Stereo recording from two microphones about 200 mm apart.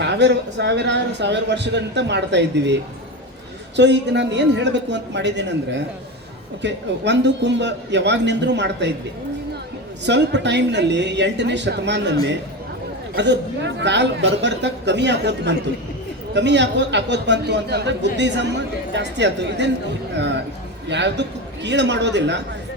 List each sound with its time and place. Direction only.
0.0 s a man's voice: 60° right (ahead or behind)
3.8 s a man's voice: 60° right (ahead or behind)
10.1 s a man's voice: 60° right (ahead or behind)
13.1 s a man's voice: 60° right (ahead or behind)
20.8 s a man's voice: 60° right (ahead or behind)